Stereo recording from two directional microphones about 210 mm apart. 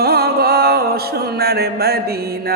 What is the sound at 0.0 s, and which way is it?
Music, 50° right (ahead or behind).